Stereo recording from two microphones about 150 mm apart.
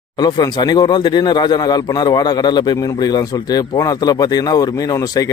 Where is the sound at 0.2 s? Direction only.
30° left (ahead or behind).